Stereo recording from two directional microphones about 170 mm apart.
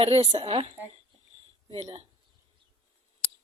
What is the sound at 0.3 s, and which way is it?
Speech, 40° right (ahead or behind).